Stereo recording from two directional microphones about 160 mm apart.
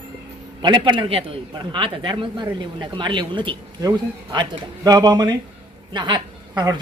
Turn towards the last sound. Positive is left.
turn(degrees=-30)  # may be behind; listen again after turning